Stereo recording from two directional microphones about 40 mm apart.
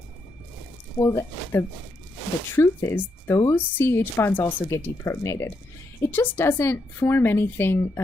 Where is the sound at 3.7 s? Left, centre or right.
Left.